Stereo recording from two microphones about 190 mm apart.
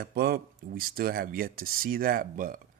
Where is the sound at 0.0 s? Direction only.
55° right (ahead or behind).